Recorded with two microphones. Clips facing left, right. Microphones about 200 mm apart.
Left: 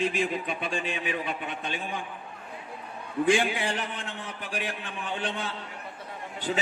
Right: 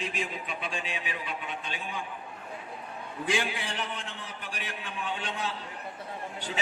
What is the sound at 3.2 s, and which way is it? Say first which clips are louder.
A man's voice: left 7 dB; 55° left (ahead or behind).